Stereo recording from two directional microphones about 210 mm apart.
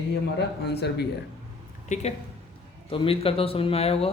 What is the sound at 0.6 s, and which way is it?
Speech, 50° left (ahead or behind).